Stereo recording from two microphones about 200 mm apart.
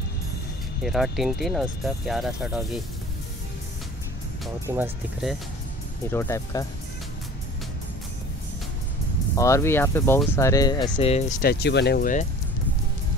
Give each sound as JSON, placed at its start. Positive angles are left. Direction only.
{"t": 0.8, "sound": "speech", "side_deg": 0}
{"t": 4.6, "sound": "speech", "side_deg": -10}
{"t": 6.1, "sound": "speech", "side_deg": 15}
{"t": 9.3, "sound": "speech", "side_deg": 15}
{"t": 11.4, "sound": "speech", "side_deg": 55}